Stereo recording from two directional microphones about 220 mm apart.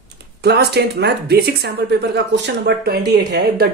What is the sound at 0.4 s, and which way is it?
Speech, 50° right (ahead or behind).